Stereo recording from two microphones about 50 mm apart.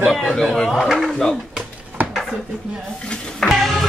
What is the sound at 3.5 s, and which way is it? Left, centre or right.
Music, centre.